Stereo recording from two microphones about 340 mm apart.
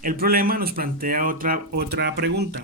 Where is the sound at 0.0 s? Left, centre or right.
Right.